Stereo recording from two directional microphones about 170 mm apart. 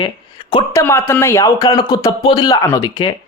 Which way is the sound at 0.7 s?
15° left (ahead or behind).